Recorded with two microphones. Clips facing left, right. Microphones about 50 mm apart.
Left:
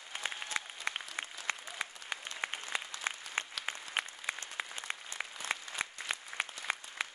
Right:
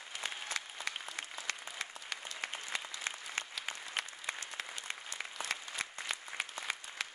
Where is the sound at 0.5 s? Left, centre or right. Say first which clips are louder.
Left 2 dB; left.